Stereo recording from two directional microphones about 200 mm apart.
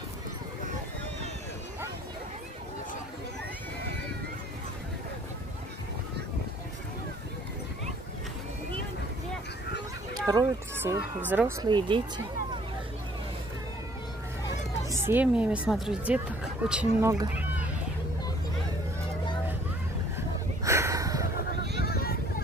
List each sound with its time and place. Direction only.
10.1 s speech: 15° right (ahead or behind)
11.6 s speech: 20° right (ahead or behind)
14.9 s speech: 10° right (ahead or behind)
20.2 s a sound: 15° right (ahead or behind)
21.8 s vehicle: 50° left (ahead or behind)